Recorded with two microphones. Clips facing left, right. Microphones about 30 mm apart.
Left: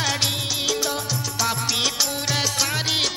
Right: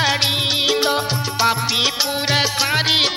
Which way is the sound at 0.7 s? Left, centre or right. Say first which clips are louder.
Right 7 dB; right.